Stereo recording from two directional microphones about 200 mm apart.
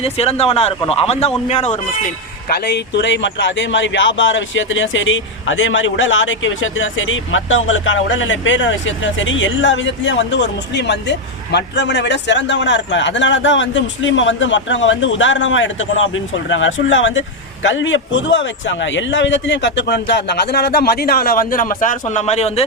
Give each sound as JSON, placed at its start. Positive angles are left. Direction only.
{"t": 0.0, "sound": "a man's voice", "side_deg": 30}
{"t": 2.5, "sound": "speech", "side_deg": 55}